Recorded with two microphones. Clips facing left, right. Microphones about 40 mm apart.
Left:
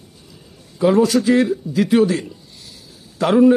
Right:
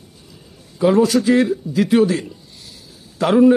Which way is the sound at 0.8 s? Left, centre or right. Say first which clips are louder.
Even; centre.